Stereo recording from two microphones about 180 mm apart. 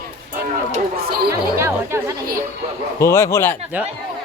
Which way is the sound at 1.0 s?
60° right (ahead or behind).